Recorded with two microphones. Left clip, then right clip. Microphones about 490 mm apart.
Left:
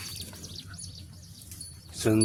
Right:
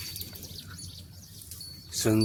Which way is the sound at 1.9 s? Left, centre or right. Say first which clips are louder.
Left 1 dB; right.